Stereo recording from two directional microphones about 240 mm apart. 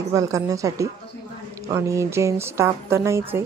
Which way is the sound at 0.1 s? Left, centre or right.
Centre.